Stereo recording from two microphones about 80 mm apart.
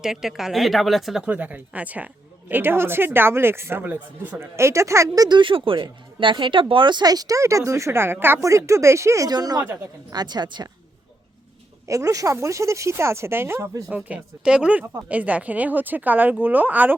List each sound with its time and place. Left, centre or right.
0.0 s a woman's voice: centre
1.2 s speech: centre; by 5.2 s right
5.2 s speech: right
8.4 s speech: right
9.3 s speech: right
11.9 s speech: right
14.1 s speech: centre